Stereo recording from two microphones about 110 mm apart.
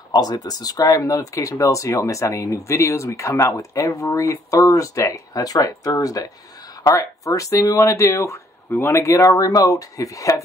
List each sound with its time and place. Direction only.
0.1 s speech: 40° left (ahead or behind)